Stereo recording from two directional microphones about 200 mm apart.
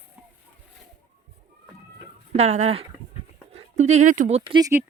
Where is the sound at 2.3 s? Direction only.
35° right (ahead or behind).